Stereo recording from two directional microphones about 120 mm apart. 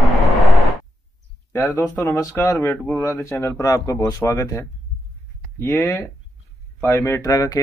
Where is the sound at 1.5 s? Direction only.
20° left (ahead or behind).